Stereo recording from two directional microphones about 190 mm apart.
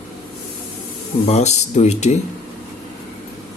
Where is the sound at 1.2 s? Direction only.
35° left (ahead or behind).